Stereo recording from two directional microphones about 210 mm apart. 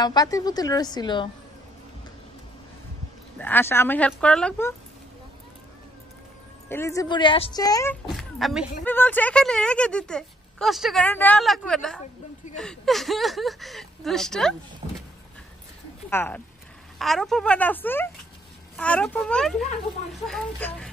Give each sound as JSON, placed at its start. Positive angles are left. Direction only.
{"t": 0.0, "sound": "a woman's voice", "side_deg": 20}
{"t": 3.3, "sound": "speech", "side_deg": 10}
{"t": 6.7, "sound": "speech", "side_deg": 15}
{"t": 8.1, "sound": "speech", "side_deg": 0}
{"t": 16.1, "sound": "speech", "side_deg": 10}